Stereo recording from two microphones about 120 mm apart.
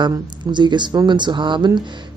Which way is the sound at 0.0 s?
40° right (ahead or behind).